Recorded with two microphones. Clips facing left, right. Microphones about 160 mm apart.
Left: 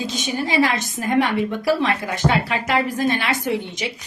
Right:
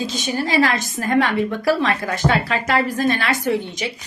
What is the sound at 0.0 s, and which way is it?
A woman's voice, 15° left (ahead or behind).